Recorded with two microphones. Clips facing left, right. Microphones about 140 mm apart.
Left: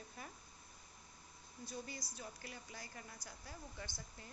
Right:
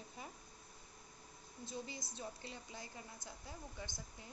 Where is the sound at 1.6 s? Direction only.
20° right (ahead or behind).